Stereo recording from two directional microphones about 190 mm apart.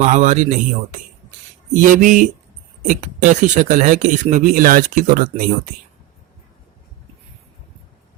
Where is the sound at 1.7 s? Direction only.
45° right (ahead or behind).